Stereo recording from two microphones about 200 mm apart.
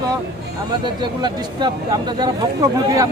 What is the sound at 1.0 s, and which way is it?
Speech, 20° right (ahead or behind).